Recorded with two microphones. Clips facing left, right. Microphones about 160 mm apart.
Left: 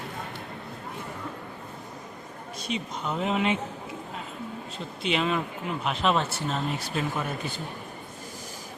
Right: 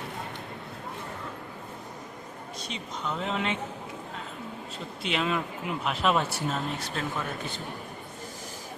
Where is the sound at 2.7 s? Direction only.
15° left (ahead or behind).